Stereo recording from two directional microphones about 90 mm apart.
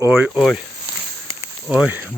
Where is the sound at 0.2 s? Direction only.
5° right (ahead or behind).